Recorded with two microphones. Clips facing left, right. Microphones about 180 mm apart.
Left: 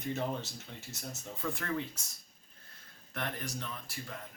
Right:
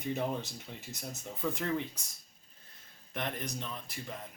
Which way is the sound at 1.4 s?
15° right (ahead or behind).